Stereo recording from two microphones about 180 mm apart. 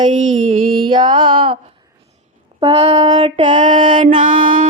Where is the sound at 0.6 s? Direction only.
30° right (ahead or behind).